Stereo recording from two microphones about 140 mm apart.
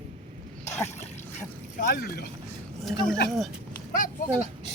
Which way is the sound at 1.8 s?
90° left.